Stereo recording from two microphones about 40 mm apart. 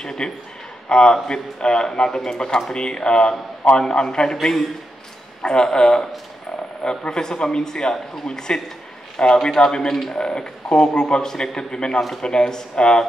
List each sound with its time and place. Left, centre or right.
0.2 s speech: centre
4.4 s a man's voice: centre
5.4 s a man's voice: centre